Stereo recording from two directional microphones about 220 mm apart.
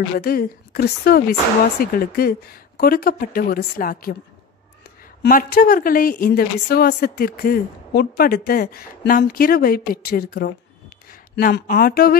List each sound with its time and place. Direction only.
0.1 s a woman's voice: 45° left (ahead or behind)
5.2 s a woman's voice: 40° left (ahead or behind)